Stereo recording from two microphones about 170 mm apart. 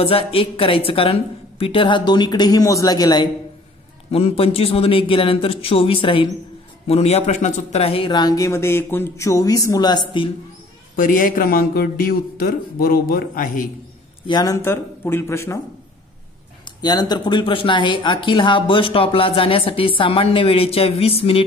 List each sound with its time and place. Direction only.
0.0 s speech: 35° left (ahead or behind)
4.1 s speech: 35° left (ahead or behind)
11.0 s a man's voice: 50° left (ahead or behind)
14.2 s a man's voice: 25° left (ahead or behind)
16.6 s speech: 25° left (ahead or behind)